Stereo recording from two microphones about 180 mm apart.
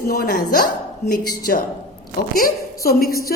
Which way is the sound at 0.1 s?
55° left (ahead or behind).